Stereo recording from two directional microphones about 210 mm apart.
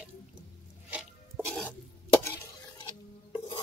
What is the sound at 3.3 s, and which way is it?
Stir, 25° left (ahead or behind).